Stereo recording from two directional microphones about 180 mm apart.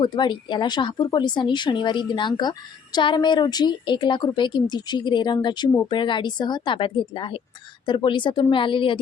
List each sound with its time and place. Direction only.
0.0 s speech: 25° left (ahead or behind)